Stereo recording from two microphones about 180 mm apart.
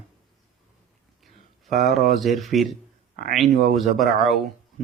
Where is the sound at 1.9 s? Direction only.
Centre (ahead or behind).